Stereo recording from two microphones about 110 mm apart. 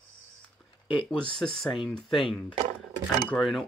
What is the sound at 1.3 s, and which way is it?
Speech, 5° left (ahead or behind).